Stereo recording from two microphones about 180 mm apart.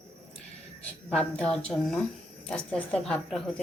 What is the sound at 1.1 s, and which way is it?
A woman's voice, 5° left (ahead or behind).